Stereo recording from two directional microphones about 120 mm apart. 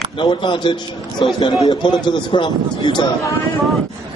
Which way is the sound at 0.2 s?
40° left (ahead or behind).